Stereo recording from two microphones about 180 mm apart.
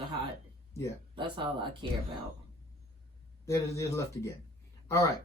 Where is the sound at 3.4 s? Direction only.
15° left (ahead or behind).